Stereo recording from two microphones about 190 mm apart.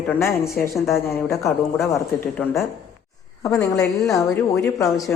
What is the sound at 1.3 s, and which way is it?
A woman's voice, 15° left (ahead or behind).